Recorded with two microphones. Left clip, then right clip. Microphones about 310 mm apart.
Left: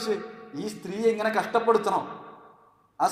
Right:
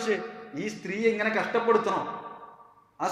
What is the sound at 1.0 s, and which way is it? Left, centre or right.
Speech, left.